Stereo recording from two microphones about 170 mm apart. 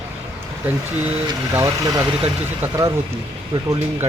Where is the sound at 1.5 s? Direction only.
15° right (ahead or behind).